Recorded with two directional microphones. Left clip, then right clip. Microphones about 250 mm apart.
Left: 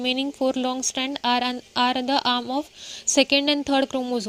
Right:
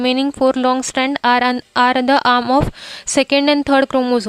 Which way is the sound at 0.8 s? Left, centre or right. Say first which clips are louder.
Right 9 dB; right.